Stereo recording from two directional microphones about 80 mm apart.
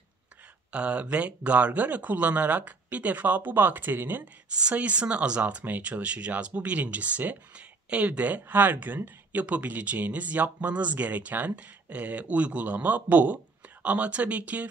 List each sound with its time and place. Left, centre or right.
0.7 s speech: centre
4.5 s speech: centre